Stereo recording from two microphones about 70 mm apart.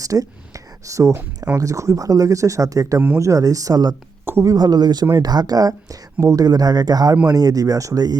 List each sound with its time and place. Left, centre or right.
0.0 s a sound: right
1.5 s speech: right
4.4 s speech: right